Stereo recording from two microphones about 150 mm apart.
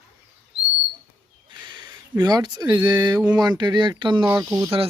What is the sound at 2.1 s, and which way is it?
Speech, 25° right (ahead or behind).